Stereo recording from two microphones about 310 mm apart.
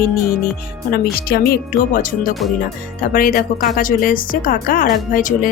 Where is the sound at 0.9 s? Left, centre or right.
Left.